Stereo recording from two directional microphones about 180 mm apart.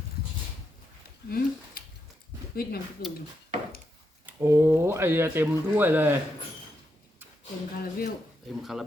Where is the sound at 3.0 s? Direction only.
55° left (ahead or behind).